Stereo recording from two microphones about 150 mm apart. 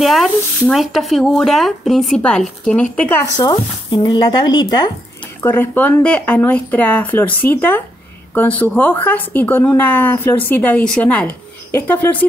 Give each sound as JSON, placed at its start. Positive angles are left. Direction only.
{"t": 0.0, "sound": "speech", "side_deg": 0}
{"t": 3.3, "sound": "speech", "side_deg": 25}
{"t": 5.4, "sound": "speech", "side_deg": 15}